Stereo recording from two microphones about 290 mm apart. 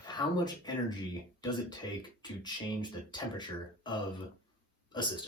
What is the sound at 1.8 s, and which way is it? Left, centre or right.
Speech, centre.